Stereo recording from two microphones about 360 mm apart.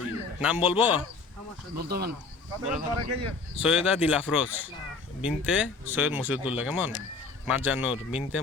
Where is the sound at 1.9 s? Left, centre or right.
Right.